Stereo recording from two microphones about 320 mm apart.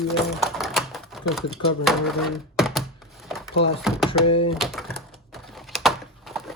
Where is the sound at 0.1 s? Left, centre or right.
Centre.